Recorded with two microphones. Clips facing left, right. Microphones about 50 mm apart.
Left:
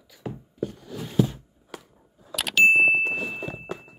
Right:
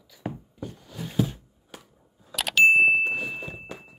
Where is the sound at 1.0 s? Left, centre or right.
Centre.